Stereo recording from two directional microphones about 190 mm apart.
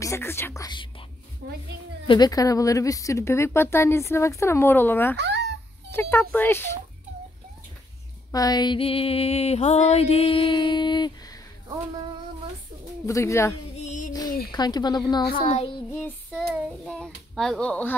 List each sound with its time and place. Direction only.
0.0 s speech: 15° left (ahead or behind)
2.0 s speech: 20° left (ahead or behind)
5.1 s speech: 65° right (ahead or behind)
5.9 s speech: 15° left (ahead or behind)
8.3 s music: 20° left (ahead or behind)
13.0 s speech: 15° left (ahead or behind)
13.7 s music: 40° left (ahead or behind)
14.5 s music: 20° left (ahead or behind)
16.3 s a child's voice: centre (ahead or behind)